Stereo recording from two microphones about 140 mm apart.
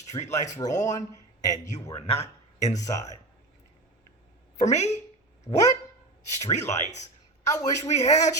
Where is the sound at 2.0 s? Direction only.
45° left (ahead or behind).